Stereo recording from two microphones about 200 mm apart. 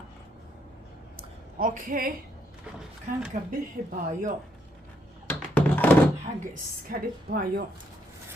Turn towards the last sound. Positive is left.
turn(degrees=-50)  # may be behind; listen again after turning